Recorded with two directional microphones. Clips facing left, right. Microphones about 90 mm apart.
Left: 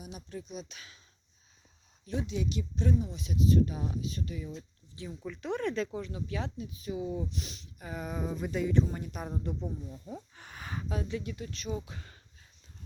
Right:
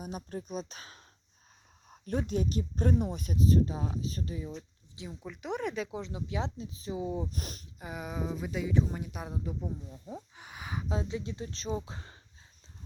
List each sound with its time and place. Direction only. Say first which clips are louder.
0.0 s speech: right 4 dB; 45° right (ahead or behind)
1.9 s speech: right 3 dB; 50° right (ahead or behind); by 4.5 s 30° right (ahead or behind)
4.9 s speech: left 2 dB; 15° right (ahead or behind)
7.3 s speech: even; 45° right (ahead or behind)
7.9 s speech: left 1 dB; 5° right (ahead or behind)
10.9 s speech: even; 25° right (ahead or behind)